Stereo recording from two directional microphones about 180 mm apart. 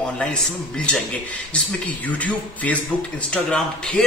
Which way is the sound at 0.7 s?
5° left (ahead or behind).